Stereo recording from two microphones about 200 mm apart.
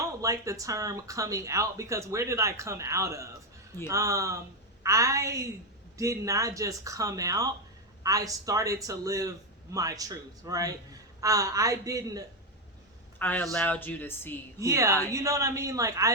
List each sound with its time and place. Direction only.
0.2 s speech: 15° right (ahead or behind)
13.1 s speech: 10° left (ahead or behind)
14.6 s speech: 15° right (ahead or behind)